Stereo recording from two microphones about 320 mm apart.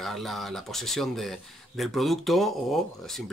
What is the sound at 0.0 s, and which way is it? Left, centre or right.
Speech, centre.